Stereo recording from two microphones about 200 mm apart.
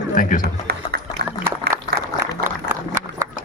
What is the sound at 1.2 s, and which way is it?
Applause, 50° right (ahead or behind).